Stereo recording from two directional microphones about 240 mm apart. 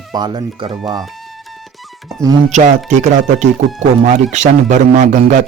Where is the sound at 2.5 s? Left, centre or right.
Right.